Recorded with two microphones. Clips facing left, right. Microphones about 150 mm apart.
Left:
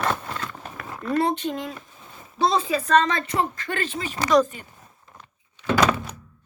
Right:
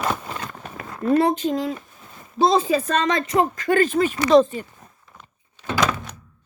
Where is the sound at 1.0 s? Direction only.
30° right (ahead or behind).